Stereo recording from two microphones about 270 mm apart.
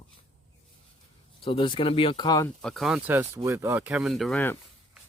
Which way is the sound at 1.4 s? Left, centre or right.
Centre.